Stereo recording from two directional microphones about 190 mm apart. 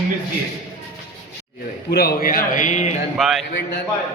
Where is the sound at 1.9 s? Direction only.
55° left (ahead or behind); by 2.9 s 40° left (ahead or behind).